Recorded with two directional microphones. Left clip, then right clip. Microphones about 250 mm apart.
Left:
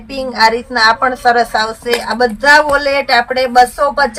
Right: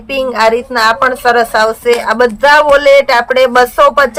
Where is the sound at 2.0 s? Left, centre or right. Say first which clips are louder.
Right 4 dB; right.